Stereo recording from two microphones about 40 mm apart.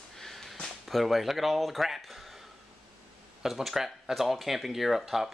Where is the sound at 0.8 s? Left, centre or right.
Centre.